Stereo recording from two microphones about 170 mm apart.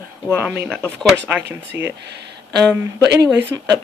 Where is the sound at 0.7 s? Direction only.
5° left (ahead or behind).